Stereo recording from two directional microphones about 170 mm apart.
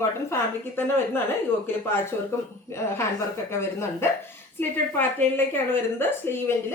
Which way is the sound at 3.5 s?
15° left (ahead or behind).